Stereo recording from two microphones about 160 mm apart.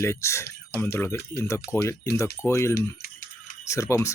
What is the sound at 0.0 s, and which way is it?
Speech, 15° left (ahead or behind).